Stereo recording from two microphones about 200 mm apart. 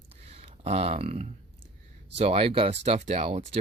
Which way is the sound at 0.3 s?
30° right (ahead or behind).